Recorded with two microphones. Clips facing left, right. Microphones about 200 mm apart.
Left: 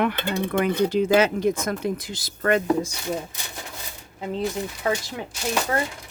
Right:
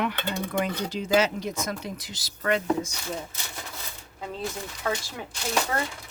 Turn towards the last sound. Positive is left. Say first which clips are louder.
# left 3 dB
turn(degrees=15)  # may be behind; listen again after turning